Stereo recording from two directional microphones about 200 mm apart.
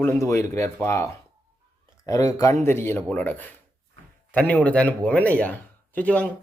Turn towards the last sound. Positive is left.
turn(degrees=5)  # may be behind; listen again after turning